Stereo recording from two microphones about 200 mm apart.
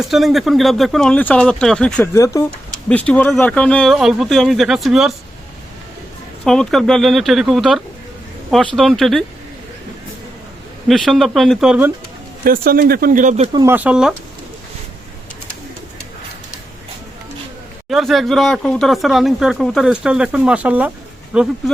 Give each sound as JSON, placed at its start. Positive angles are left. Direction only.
{"t": 0.0, "sound": "speech", "side_deg": 0}
{"t": 2.1, "sound": "speech", "side_deg": 15}
{"t": 6.4, "sound": "speech", "side_deg": 0}
{"t": 10.8, "sound": "speech", "side_deg": 0}
{"t": 12.5, "sound": "speech", "side_deg": -45}
{"t": 13.5, "sound": "speech", "side_deg": -20}
{"t": 13.7, "sound": "speech", "side_deg": -5}
{"t": 17.8, "sound": "speech", "side_deg": 0}